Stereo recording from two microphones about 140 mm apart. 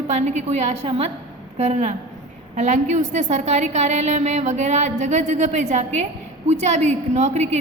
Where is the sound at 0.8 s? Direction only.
40° right (ahead or behind).